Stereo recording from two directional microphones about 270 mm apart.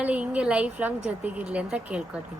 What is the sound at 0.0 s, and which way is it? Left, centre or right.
Speech, centre.